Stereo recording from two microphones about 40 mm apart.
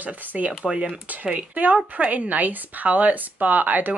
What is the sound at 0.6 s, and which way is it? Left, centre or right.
Speech, right.